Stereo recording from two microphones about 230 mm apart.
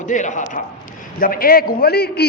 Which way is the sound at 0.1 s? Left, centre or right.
Left.